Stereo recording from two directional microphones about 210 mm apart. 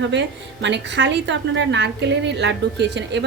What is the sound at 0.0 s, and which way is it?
A woman's voice, 60° right (ahead or behind).